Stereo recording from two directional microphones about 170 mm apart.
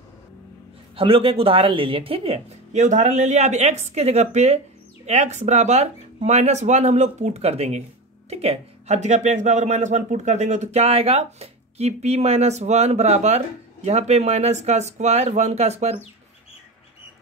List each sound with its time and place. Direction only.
0.9 s speech: 35° right (ahead or behind)